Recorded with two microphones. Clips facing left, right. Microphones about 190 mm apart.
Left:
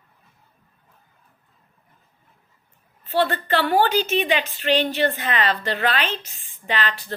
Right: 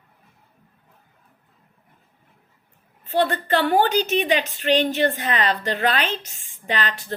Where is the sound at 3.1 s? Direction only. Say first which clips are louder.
Right 1 dB; 40° right (ahead or behind).